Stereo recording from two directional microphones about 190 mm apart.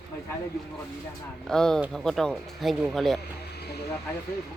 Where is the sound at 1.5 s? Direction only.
5° left (ahead or behind).